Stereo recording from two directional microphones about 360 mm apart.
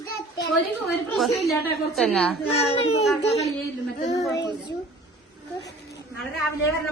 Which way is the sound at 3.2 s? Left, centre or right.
Centre.